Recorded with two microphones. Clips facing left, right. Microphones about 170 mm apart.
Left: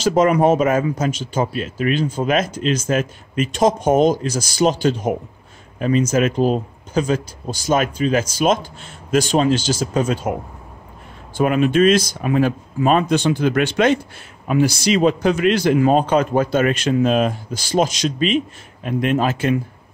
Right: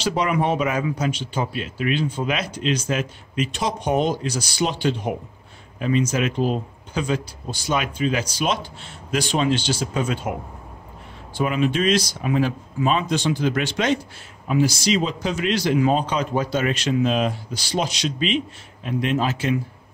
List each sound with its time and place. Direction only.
0.0 s speech: 45° left (ahead or behind)
11.3 s speech: 50° left (ahead or behind)